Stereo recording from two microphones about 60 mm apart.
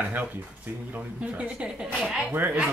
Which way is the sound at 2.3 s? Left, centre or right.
Right.